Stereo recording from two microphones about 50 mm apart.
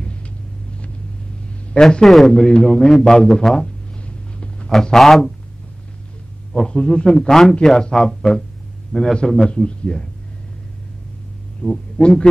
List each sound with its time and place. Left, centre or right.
1.7 s a man's voice: centre
2.0 s a man's voice: centre
2.4 s a man's voice: centre
4.0 s a sound: centre
4.9 s a man's voice: centre
6.5 s a man's voice: centre
8.9 s a man's voice: centre
11.6 s speech: left